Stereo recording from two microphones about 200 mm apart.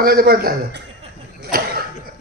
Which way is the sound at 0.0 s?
50° right (ahead or behind).